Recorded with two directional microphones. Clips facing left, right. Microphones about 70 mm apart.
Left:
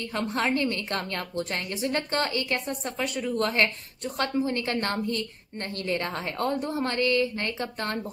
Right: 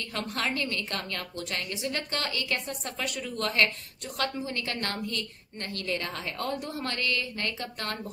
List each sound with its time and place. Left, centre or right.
0.1 s a woman's voice: left